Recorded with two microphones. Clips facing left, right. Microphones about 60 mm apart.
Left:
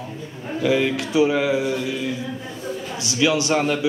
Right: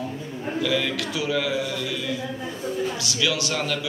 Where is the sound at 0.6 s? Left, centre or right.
Left.